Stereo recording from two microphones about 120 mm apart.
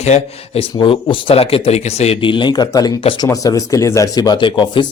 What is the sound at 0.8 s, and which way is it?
Speech, 45° left (ahead or behind).